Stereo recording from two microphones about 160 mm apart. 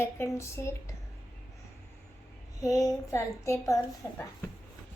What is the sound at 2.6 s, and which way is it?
A woman's voice, 20° left (ahead or behind).